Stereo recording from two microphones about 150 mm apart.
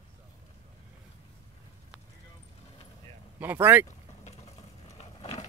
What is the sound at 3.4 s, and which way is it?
Speech, 10° right (ahead or behind).